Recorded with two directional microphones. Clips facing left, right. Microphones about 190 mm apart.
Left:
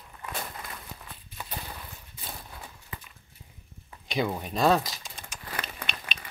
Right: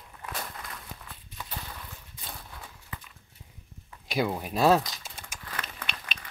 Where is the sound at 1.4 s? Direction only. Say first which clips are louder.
Left 2 dB; 15° left (ahead or behind).